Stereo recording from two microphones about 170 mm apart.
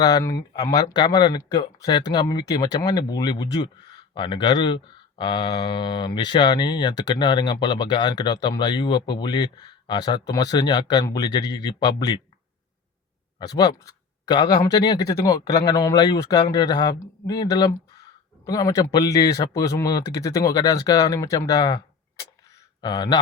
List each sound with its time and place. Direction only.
0.0 s speech: 25° left (ahead or behind)
13.4 s speech: 20° left (ahead or behind)
22.8 s speech: 25° left (ahead or behind)